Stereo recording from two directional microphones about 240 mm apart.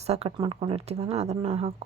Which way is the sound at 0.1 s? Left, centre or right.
Right.